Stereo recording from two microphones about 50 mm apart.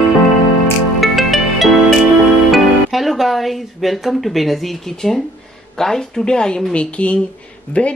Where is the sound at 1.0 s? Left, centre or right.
Centre.